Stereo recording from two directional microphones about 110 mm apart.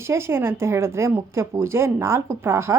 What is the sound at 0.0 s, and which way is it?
A woman's voice, 25° right (ahead or behind).